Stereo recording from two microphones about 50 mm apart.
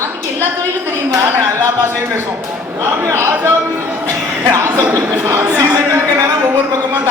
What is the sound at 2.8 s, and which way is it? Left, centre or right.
Speech, right.